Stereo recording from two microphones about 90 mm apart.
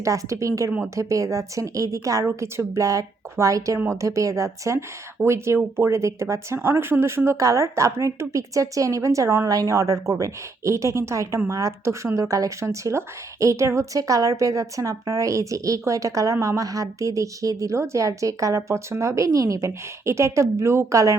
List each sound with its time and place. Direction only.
0.0 s speech: 35° right (ahead or behind)